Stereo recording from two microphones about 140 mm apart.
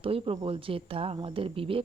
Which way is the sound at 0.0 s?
40° right (ahead or behind).